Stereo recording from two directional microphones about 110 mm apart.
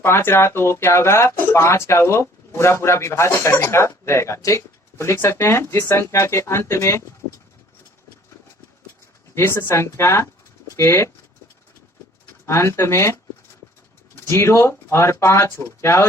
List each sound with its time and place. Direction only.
0.0 s speech: 20° left (ahead or behind)
7.2 s vehicle: 50° right (ahead or behind)
9.3 s speech: 20° left (ahead or behind)
12.5 s speech: 25° left (ahead or behind)
14.3 s speech: 25° left (ahead or behind)